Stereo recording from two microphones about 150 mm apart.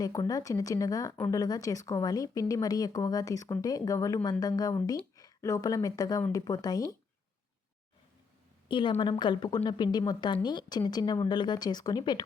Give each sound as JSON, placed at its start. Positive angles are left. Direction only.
{"t": 0.0, "sound": "speech", "side_deg": 25}
{"t": 8.6, "sound": "a woman's voice", "side_deg": 30}